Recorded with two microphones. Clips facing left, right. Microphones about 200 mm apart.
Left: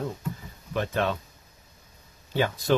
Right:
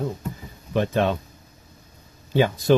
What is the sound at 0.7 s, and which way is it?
Speech, 20° right (ahead or behind).